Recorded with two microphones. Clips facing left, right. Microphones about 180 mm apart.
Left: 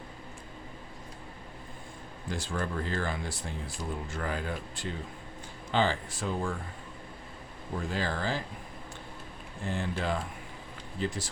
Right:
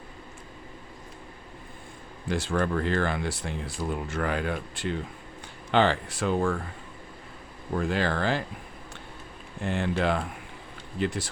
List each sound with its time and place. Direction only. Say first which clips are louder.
2.2 s speech: right 7 dB; 70° right (ahead or behind)
7.8 s speech: right 6 dB; 70° right (ahead or behind)
9.6 s speech: right 6 dB; 70° right (ahead or behind)